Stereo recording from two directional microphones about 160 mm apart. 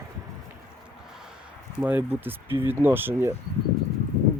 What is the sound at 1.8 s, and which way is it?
Speech, 10° right (ahead or behind).